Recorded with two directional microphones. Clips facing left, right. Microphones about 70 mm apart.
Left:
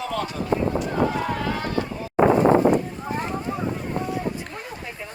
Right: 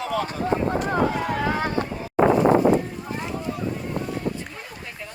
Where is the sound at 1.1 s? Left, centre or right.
Centre.